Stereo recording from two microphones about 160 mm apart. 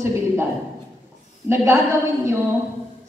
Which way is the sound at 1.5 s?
20° right (ahead or behind).